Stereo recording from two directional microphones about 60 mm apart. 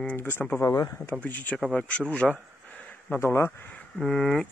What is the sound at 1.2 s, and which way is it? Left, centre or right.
Speech, left.